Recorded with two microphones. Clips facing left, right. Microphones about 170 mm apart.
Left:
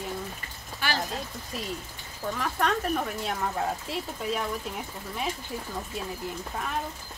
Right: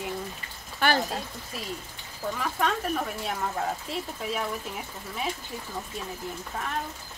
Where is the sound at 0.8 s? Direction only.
55° right (ahead or behind).